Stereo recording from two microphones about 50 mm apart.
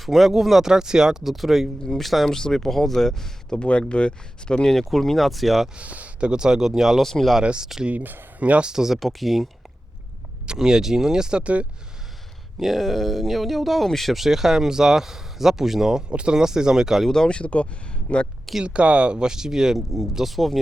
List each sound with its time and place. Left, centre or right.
0.0 s speech: centre
3.6 s speech: left
4.7 s speech: centre
5.7 s speech: right; by 7.3 s centre
7.4 s speech: centre
7.9 s speech: right
8.7 s speech: centre
10.4 s speech: centre
12.5 s speech: centre
16.0 s speech: right
17.1 s speech: centre
18.6 s speech: right; by 20.6 s centre